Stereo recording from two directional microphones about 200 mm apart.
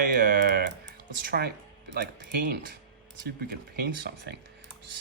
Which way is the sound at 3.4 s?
50° right (ahead or behind).